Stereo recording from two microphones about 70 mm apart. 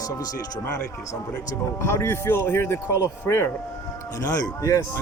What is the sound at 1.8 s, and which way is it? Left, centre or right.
Speech, left.